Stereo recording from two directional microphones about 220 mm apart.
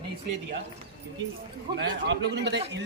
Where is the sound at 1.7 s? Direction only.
50° right (ahead or behind).